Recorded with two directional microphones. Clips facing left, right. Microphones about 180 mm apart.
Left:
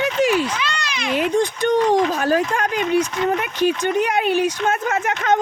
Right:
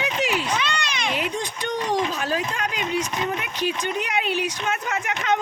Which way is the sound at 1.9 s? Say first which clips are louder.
Left 7 dB; 50° left (ahead or behind).